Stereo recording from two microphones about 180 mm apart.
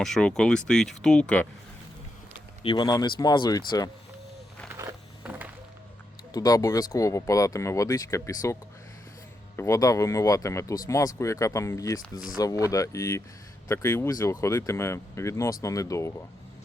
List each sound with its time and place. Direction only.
0.0 s speech: 5° left (ahead or behind)
2.6 s speech: 25° left (ahead or behind)
4.7 s a sound: 20° right (ahead or behind)
5.2 s music: 10° right (ahead or behind)
6.3 s speech: 20° left (ahead or behind)
9.6 s speech: 15° left (ahead or behind)